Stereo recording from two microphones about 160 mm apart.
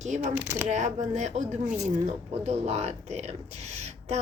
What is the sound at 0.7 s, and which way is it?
Speech, 45° right (ahead or behind).